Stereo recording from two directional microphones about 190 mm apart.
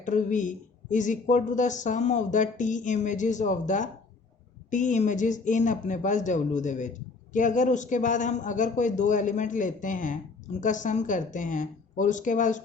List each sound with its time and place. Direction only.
0.0 s speech: 40° left (ahead or behind)